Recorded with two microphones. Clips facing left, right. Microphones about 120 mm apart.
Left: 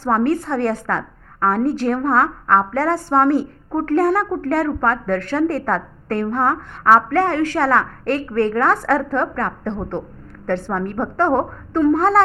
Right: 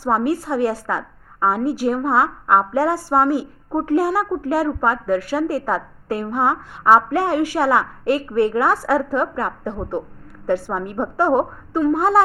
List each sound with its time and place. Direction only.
0.0 s a woman's voice: 10° right (ahead or behind)